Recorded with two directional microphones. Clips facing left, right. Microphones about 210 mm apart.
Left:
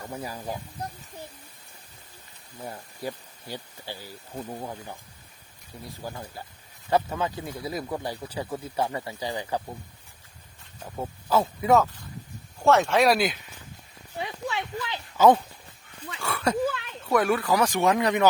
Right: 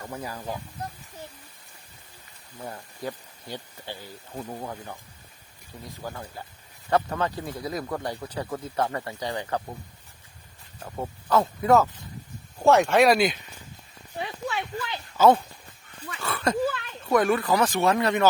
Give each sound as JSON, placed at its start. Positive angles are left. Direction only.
{"t": 0.1, "sound": "speech", "side_deg": 10}
{"t": 2.6, "sound": "speech", "side_deg": 10}
{"t": 6.9, "sound": "speech", "side_deg": 0}
{"t": 11.0, "sound": "speech", "side_deg": 5}
{"t": 12.6, "sound": "speech", "side_deg": -15}
{"t": 12.9, "sound": "speech", "side_deg": 0}
{"t": 14.5, "sound": "a sound", "side_deg": 15}
{"t": 17.1, "sound": "speech", "side_deg": 5}